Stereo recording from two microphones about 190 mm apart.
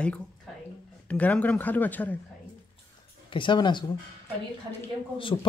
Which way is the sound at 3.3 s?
25° left (ahead or behind).